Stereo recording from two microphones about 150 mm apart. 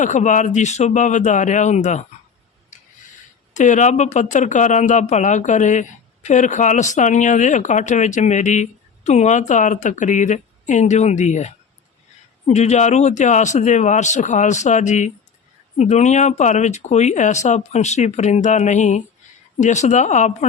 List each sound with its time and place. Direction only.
0.0 s speech: 55° left (ahead or behind)
2.7 s a sound: 55° left (ahead or behind)
3.5 s speech: 55° left (ahead or behind)